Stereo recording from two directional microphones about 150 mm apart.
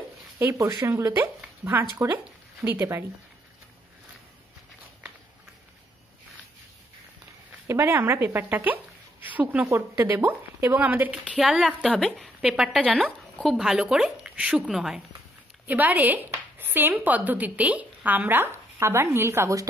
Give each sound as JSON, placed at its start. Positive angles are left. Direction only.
{"t": 0.4, "sound": "speech", "side_deg": -20}
{"t": 7.6, "sound": "speech", "side_deg": -20}